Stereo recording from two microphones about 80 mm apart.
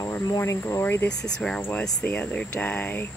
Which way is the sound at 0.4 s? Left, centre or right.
Left.